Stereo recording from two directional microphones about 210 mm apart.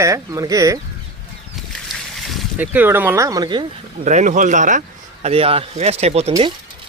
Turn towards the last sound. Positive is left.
turn(degrees=-30)  # may be behind; listen again after turning